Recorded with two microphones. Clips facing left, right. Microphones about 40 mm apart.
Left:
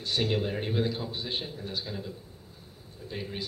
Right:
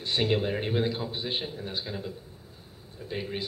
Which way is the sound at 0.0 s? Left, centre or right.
Right.